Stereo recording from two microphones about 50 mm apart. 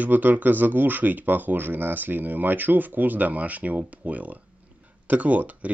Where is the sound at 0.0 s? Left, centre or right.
Right.